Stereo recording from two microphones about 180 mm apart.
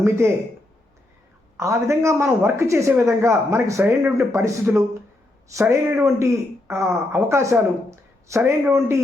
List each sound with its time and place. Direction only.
1.5 s speech: 15° right (ahead or behind)